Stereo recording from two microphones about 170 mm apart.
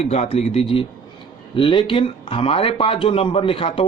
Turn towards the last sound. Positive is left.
turn(degrees=30)  # may be behind; listen again after turning